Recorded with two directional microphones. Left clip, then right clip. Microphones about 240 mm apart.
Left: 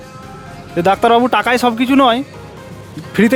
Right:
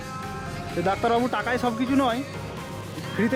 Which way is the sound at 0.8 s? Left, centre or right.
Left.